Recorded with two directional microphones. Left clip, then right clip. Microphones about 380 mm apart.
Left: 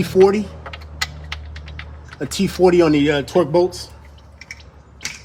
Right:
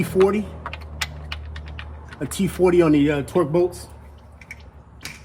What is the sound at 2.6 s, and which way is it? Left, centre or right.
A man's voice, left.